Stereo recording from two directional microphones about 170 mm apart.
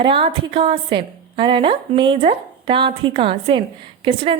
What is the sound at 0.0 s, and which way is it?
A woman's voice, 30° right (ahead or behind).